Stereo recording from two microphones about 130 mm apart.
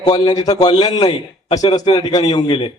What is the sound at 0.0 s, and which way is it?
Speech, 35° left (ahead or behind).